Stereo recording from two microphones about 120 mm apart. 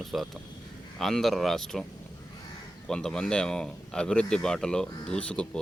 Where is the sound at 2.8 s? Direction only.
5° left (ahead or behind).